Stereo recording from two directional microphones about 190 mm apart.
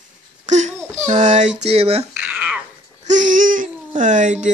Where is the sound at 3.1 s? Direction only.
40° right (ahead or behind).